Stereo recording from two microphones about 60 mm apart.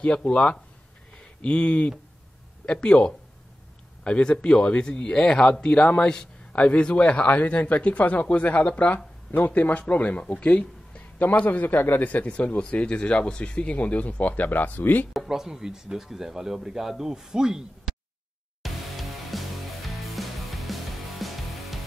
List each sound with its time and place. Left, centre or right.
0.0 s speech: left
15.1 s speech: centre
18.6 s music: centre